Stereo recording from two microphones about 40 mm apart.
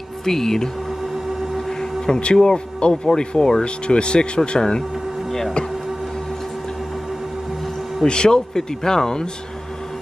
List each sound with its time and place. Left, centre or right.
0.2 s speech: centre
1.7 s a sound: centre
2.1 s speech: left
8.0 s speech: centre